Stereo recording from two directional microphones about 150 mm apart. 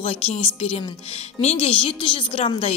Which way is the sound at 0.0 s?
45° left (ahead or behind).